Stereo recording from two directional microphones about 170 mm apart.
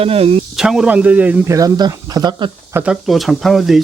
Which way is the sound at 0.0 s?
35° right (ahead or behind).